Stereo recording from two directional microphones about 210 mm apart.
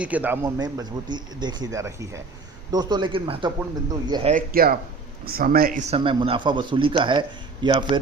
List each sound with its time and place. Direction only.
0.0 s speech: 5° right (ahead or behind); by 4.4 s 25° right (ahead or behind)
4.4 s a man's voice: 45° right (ahead or behind)
5.9 s speech: 25° right (ahead or behind)